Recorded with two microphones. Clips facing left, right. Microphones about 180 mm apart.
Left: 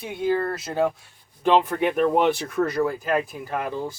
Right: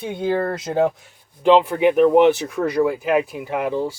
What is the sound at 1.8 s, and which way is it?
Speech, 10° right (ahead or behind).